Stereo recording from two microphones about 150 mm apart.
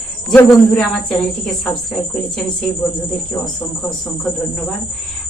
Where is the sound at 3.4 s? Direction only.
5° left (ahead or behind).